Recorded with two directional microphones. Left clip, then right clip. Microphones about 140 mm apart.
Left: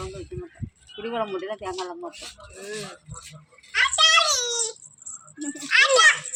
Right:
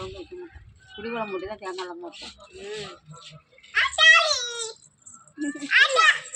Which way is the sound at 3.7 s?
30° left (ahead or behind).